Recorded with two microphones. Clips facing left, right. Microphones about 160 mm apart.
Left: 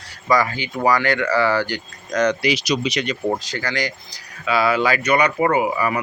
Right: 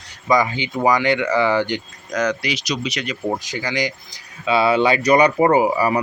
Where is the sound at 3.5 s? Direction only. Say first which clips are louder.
Right 2 dB; 15° right (ahead or behind).